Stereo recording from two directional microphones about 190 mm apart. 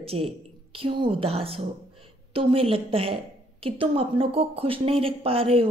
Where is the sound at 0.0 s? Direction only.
30° right (ahead or behind).